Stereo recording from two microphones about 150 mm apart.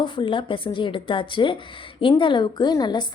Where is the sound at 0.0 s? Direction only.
35° left (ahead or behind).